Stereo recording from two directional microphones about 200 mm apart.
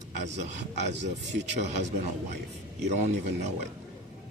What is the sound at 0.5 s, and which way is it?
Speech, 35° right (ahead or behind).